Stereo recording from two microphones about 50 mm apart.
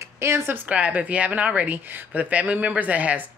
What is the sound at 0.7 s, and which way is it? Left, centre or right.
Speech, right.